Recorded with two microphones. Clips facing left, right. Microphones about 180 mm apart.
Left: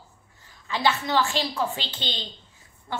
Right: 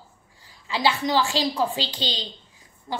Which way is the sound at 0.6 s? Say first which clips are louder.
Right 2 dB; 10° right (ahead or behind).